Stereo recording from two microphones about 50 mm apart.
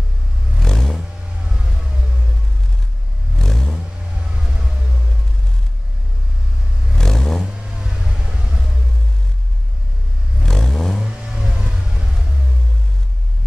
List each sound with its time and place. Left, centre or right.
0.6 s vehicle: centre
3.3 s vehicle: centre
4.2 s vehicle: centre
7.0 s vehicle: centre
7.5 s vehicle: centre
10.4 s vehicle: centre
11.1 s vehicle: centre